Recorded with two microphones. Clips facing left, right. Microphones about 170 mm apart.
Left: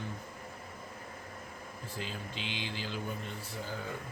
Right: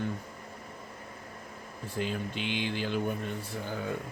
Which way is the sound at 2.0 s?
55° right (ahead or behind).